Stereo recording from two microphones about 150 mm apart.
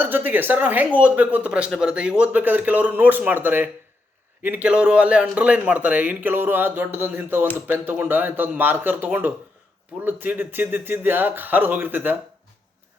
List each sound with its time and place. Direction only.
0.0 s speech: 15° right (ahead or behind)